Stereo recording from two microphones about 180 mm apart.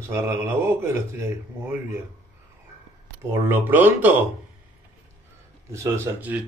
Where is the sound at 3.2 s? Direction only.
15° right (ahead or behind).